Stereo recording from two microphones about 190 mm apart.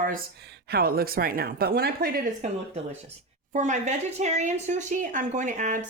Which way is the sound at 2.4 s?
35° right (ahead or behind).